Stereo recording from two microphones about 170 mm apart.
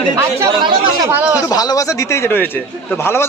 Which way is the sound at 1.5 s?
20° left (ahead or behind).